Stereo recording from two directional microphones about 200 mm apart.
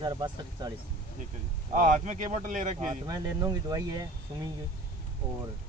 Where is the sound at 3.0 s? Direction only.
20° right (ahead or behind).